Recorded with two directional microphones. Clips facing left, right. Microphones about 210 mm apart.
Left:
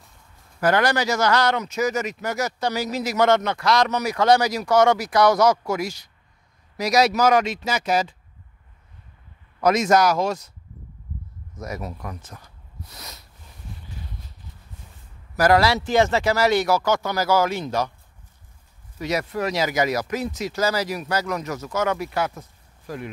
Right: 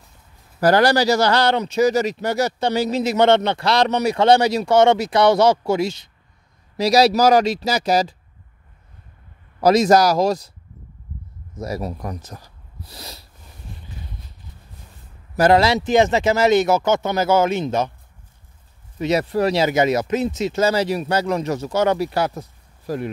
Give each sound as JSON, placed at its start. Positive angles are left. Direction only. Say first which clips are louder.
{"t": 0.6, "sound": "speech", "louder": "right 5 dB", "side_deg": -35}
{"t": 9.6, "sound": "speech", "louder": "right 4 dB", "side_deg": -35}
{"t": 11.5, "sound": "speech", "louder": "right 5 dB", "side_deg": -30}
{"t": 15.3, "sound": "speech", "louder": "right 3 dB", "side_deg": -25}
{"t": 18.9, "sound": "speech", "louder": "right 6 dB", "side_deg": -25}